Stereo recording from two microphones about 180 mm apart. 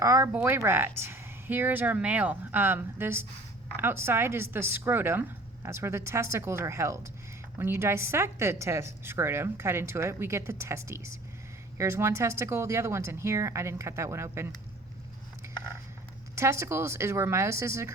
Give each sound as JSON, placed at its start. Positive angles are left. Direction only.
{"t": 0.0, "sound": "a woman's voice", "side_deg": -15}
{"t": 16.3, "sound": "a woman's voice", "side_deg": -15}